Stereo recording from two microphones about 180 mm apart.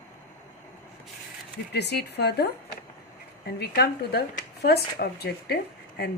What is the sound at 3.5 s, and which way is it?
A woman's voice, 65° left (ahead or behind).